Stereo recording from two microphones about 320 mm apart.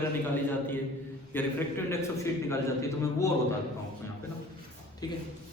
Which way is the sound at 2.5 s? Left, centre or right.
Centre.